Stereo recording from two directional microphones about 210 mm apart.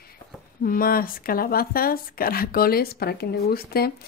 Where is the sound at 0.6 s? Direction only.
45° left (ahead or behind).